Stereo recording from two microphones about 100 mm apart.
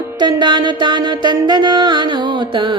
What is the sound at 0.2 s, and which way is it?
Music, 50° right (ahead or behind).